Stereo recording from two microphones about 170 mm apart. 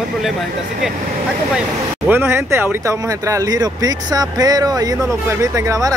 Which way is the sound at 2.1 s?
15° right (ahead or behind).